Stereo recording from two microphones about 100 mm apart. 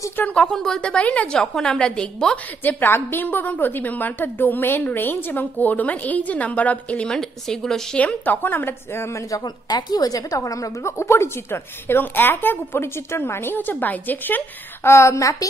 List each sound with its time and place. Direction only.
0.1 s a woman's voice: 15° left (ahead or behind)
9.4 s a woman's voice: 45° left (ahead or behind)